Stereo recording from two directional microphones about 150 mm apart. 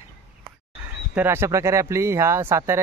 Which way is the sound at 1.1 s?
15° right (ahead or behind).